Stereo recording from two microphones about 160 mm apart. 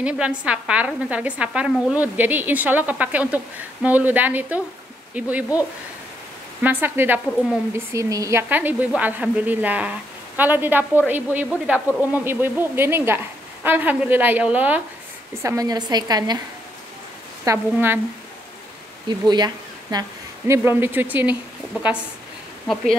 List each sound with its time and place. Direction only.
0.0 s a woman's voice: 5° right (ahead or behind)
15.4 s a woman's voice: 20° right (ahead or behind)
17.5 s a woman's voice: 15° right (ahead or behind)
19.0 s speech: 25° right (ahead or behind); by 21.4 s 10° right (ahead or behind)